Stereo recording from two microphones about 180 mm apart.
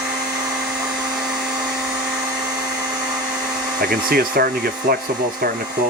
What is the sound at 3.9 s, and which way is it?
Speech, 55° right (ahead or behind).